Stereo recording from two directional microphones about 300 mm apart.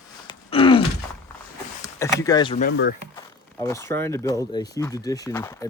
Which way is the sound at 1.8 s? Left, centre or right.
Centre.